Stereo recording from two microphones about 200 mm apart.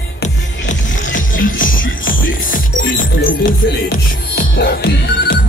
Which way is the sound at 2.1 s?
45° left (ahead or behind).